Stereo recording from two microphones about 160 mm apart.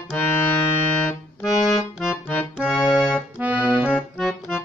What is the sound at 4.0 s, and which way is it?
Accordion, 5° left (ahead or behind).